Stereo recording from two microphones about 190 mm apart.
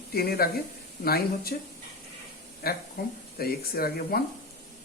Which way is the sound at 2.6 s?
50° left (ahead or behind).